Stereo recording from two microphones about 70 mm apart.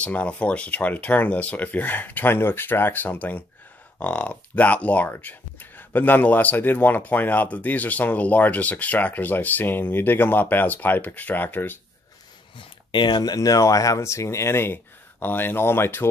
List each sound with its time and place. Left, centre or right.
0.0 s speech: left
12.9 s speech: left